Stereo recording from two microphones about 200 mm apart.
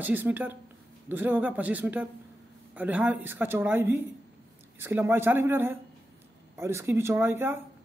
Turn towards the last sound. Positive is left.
turn(degrees=-10)  # may be behind; listen again after turning